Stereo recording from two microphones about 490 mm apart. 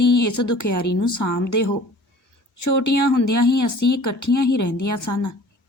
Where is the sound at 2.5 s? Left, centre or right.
Left.